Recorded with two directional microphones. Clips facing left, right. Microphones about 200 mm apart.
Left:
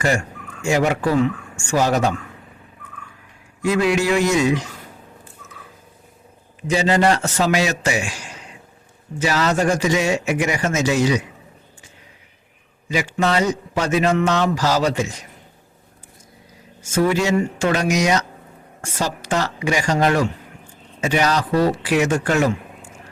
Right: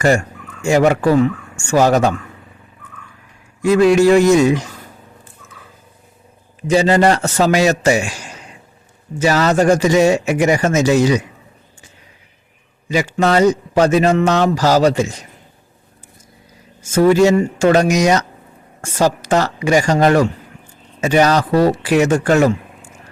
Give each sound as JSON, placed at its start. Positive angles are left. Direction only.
{"t": 0.7, "sound": "speech", "side_deg": -50}
{"t": 3.6, "sound": "speech", "side_deg": -45}
{"t": 6.7, "sound": "a man's voice", "side_deg": -40}
{"t": 9.1, "sound": "a man's voice", "side_deg": -45}
{"t": 12.9, "sound": "a man's voice", "side_deg": -40}
{"t": 16.9, "sound": "speech", "side_deg": -40}